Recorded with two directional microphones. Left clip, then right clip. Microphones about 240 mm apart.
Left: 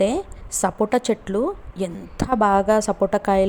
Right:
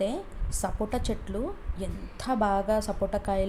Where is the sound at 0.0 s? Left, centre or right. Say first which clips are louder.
Left 10 dB; left.